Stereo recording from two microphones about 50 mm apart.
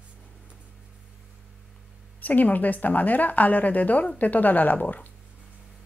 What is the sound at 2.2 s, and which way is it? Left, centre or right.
A woman's voice, left.